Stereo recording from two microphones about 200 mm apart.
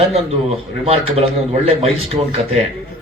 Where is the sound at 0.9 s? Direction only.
30° right (ahead or behind).